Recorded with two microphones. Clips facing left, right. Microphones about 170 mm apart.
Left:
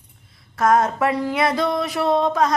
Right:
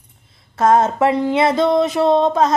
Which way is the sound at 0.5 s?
25° right (ahead or behind).